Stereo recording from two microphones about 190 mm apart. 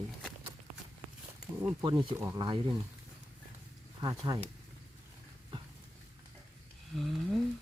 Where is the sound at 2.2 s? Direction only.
15° right (ahead or behind).